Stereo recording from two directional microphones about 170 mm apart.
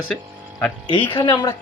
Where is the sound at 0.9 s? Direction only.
30° left (ahead or behind).